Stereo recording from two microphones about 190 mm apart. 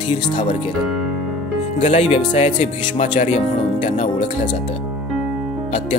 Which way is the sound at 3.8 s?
30° left (ahead or behind).